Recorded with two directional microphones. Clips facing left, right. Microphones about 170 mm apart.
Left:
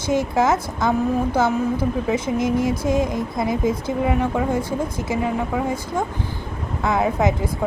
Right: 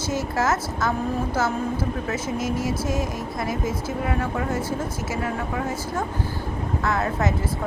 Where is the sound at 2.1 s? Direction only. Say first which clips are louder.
Left 6 dB; 15° left (ahead or behind).